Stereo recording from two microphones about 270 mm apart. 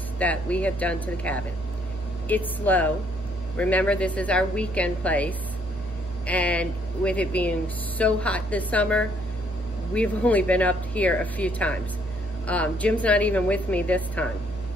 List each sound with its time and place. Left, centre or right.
0.2 s speech: centre